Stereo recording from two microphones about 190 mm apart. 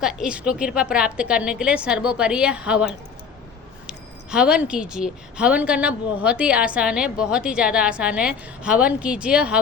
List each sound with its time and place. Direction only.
0.0 s speech: 5° right (ahead or behind)